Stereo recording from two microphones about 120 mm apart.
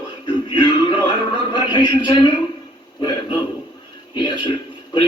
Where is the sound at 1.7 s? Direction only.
40° left (ahead or behind).